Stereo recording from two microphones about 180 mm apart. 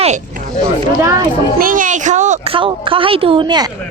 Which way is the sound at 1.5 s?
50° right (ahead or behind).